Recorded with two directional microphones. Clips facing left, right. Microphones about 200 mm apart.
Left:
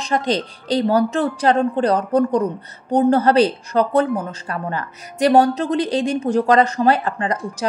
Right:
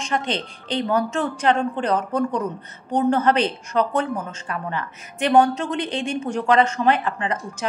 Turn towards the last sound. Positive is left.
turn(degrees=35)  # may be behind; listen again after turning